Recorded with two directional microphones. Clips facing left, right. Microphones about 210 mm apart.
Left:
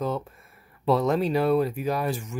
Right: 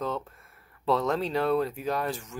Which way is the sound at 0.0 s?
10° left (ahead or behind).